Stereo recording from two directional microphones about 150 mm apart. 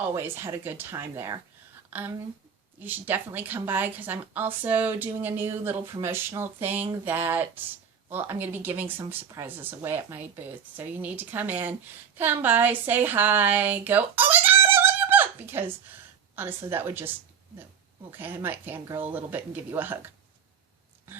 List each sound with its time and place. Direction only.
0.0 s a woman's voice: 15° right (ahead or behind)